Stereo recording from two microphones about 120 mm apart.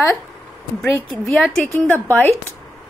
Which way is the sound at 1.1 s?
5° left (ahead or behind).